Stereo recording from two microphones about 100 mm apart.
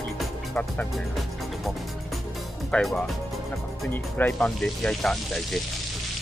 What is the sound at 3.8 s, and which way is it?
Speech, 15° left (ahead or behind).